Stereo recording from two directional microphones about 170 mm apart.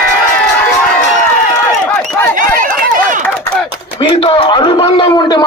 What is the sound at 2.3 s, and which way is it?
Run, 55° right (ahead or behind).